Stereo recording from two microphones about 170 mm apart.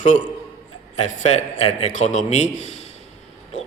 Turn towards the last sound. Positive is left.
turn(degrees=45)  # may be behind; listen again after turning